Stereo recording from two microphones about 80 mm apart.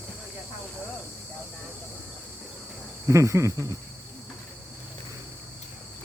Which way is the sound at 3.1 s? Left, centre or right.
Right.